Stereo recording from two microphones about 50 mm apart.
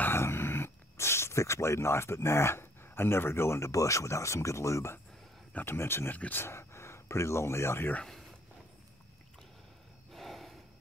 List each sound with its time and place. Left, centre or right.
0.1 s speech: left
5.7 s speech: left
8.0 s a sound: centre
10.1 s gasp: centre